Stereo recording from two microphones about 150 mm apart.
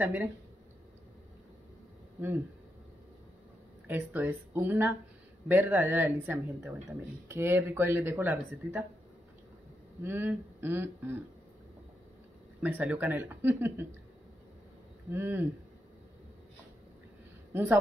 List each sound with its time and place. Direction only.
0.0 s speech: 10° right (ahead or behind)
3.8 s speech: 10° right (ahead or behind)
10.0 s speech: 15° right (ahead or behind)
12.6 s speech: 10° right (ahead or behind)
15.0 s speech: 15° right (ahead or behind)
17.5 s speech: 15° right (ahead or behind)